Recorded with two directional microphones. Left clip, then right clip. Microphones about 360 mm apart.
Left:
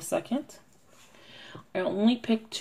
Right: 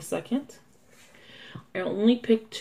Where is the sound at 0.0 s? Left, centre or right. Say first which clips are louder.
Left 1 dB; left.